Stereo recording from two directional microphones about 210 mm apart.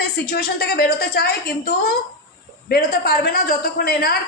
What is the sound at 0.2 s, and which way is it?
A woman's voice, 45° left (ahead or behind).